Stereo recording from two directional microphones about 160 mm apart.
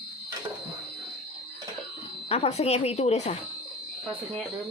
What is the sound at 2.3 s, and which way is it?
Speech, 40° left (ahead or behind).